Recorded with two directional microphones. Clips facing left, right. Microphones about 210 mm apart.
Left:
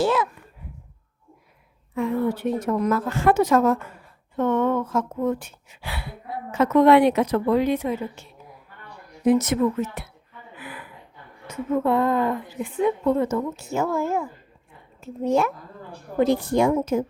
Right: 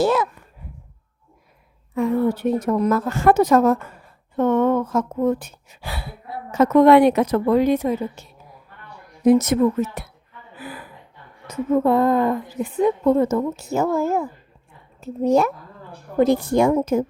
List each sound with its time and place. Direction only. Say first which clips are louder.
0.0 s a sound: right 3 dB; 40° right (ahead or behind)
2.0 s a woman's voice: right 4 dB; 40° right (ahead or behind)
9.2 s a woman's voice: right 4 dB; 40° right (ahead or behind)
10.6 s gasp: right 4 dB; 35° right (ahead or behind)
11.4 s a woman's voice: right 4 dB; 40° right (ahead or behind)